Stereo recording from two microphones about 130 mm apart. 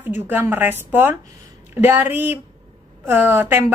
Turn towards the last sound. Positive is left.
turn(degrees=-15)  # may be behind; listen again after turning